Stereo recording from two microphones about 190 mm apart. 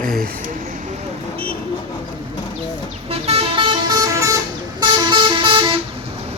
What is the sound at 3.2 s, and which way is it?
Vehicle, 30° right (ahead or behind).